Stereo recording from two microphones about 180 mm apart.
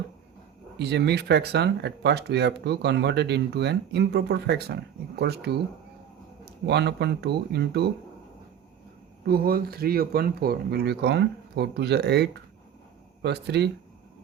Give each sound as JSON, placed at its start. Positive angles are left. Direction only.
{"t": 0.8, "sound": "speech", "side_deg": -70}
{"t": 9.2, "sound": "speech", "side_deg": -55}